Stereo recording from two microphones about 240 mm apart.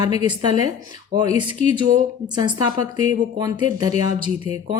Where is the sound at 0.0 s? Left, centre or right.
Centre.